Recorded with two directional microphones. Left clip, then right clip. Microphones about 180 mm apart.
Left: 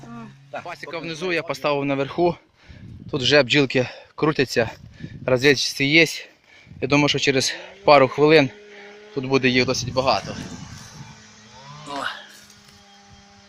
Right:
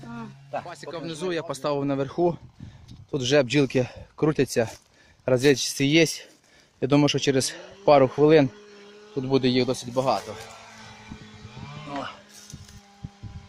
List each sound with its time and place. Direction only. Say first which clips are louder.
0.6 s a man's voice: left 4 dB; 5° right (ahead or behind)